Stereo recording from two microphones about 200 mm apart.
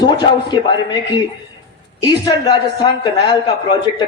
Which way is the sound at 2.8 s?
25° left (ahead or behind).